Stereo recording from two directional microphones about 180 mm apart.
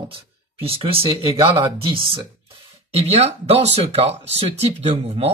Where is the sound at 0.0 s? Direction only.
30° right (ahead or behind).